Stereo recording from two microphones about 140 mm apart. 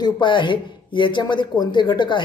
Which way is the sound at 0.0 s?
35° left (ahead or behind).